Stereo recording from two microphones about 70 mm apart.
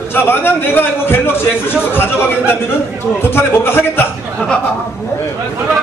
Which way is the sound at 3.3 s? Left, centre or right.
Left.